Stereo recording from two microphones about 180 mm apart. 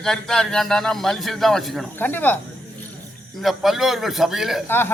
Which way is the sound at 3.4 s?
Centre (ahead or behind).